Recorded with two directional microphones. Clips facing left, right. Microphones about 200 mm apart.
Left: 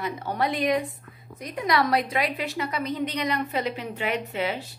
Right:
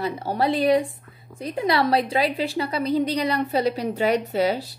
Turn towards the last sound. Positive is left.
turn(degrees=-35)  # may be behind; listen again after turning